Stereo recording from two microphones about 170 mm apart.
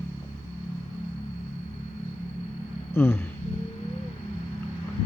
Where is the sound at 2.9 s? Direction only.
15° left (ahead or behind).